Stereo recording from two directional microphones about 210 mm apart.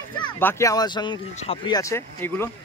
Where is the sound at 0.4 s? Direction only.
10° left (ahead or behind).